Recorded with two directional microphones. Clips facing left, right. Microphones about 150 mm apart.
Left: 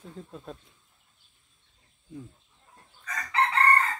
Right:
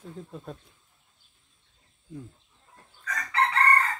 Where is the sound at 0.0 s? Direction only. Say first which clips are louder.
Right 2 dB; centre (ahead or behind).